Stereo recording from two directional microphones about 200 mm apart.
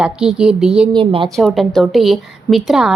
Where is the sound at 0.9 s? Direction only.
25° right (ahead or behind).